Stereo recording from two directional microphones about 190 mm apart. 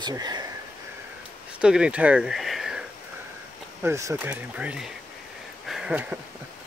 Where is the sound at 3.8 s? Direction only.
15° right (ahead or behind).